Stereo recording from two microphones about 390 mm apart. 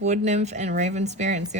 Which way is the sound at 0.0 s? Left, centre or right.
Centre.